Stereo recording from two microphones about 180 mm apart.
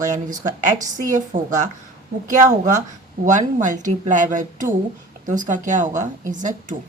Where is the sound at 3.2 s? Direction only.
45° right (ahead or behind).